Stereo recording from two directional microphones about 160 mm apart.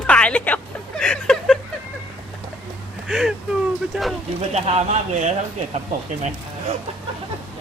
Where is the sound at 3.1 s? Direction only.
5° right (ahead or behind).